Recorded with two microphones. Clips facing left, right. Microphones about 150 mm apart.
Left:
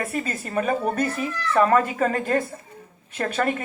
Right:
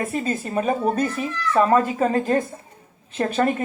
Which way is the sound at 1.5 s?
15° right (ahead or behind).